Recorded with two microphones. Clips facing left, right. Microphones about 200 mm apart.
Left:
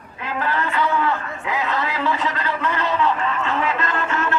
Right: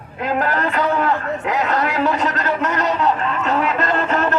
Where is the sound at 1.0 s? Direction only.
70° right (ahead or behind).